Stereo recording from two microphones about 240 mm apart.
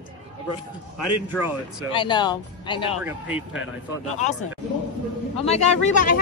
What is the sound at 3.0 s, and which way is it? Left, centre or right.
Speech, centre.